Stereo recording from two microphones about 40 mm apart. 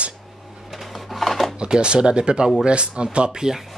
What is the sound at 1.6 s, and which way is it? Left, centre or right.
Speech, right.